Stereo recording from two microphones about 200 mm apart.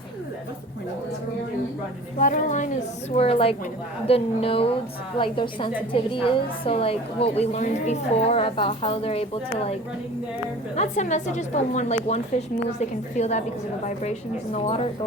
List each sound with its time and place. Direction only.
2.1 s a woman's voice: 40° left (ahead or behind)
10.8 s a woman's voice: 35° left (ahead or behind)